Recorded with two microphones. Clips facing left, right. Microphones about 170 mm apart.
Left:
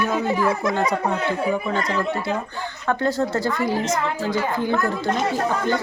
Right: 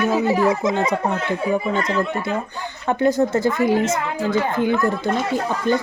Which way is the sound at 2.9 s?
20° right (ahead or behind).